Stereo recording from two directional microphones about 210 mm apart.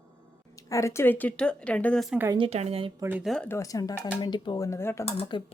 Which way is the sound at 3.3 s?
10° left (ahead or behind).